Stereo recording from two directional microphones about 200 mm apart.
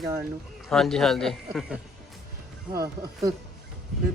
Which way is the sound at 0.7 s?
Centre (ahead or behind).